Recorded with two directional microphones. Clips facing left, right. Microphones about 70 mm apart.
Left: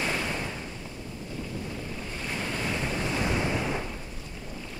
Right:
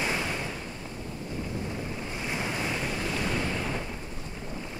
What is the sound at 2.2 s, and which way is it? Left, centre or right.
Waves, centre.